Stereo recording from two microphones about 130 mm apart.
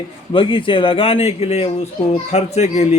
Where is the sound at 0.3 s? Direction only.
40° left (ahead or behind).